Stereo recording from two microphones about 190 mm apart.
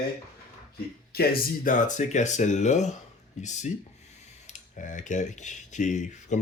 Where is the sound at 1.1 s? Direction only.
55° left (ahead or behind).